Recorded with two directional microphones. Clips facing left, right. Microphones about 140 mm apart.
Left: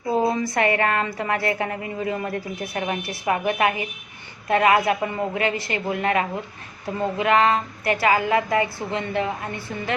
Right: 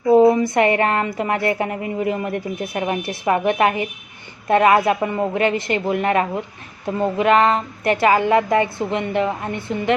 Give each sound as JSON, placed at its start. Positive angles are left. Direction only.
{"t": 0.1, "sound": "a woman's voice", "side_deg": -20}